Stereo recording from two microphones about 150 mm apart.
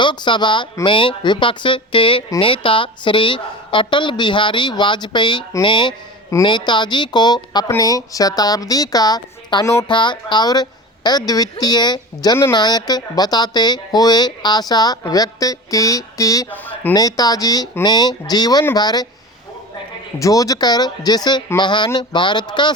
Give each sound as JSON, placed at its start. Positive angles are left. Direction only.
{"t": 0.0, "sound": "a woman's voice", "side_deg": 30}
{"t": 16.5, "sound": "speech", "side_deg": 10}
{"t": 16.9, "sound": "speech", "side_deg": 25}
{"t": 20.1, "sound": "a woman's voice", "side_deg": 20}